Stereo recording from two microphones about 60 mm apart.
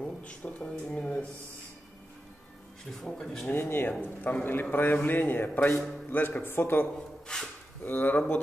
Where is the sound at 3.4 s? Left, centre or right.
Left.